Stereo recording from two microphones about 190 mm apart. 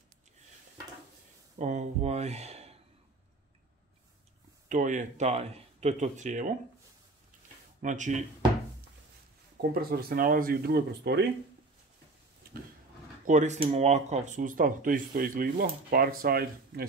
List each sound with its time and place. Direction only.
1.6 s speech: 40° right (ahead or behind)
4.6 s speech: 40° right (ahead or behind)
7.8 s speech: 40° right (ahead or behind)
9.6 s speech: 55° right (ahead or behind)
12.4 s a sound: 50° right (ahead or behind)
13.3 s speech: 40° right (ahead or behind)